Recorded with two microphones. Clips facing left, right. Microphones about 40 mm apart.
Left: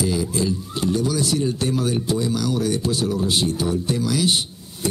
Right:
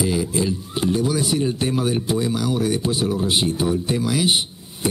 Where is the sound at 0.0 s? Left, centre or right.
Right.